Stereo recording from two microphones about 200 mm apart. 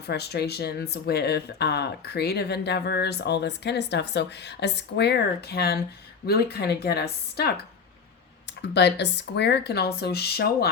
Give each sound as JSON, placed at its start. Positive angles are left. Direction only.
{"t": 0.1, "sound": "a woman's voice", "side_deg": 55}
{"t": 8.6, "sound": "speech", "side_deg": 55}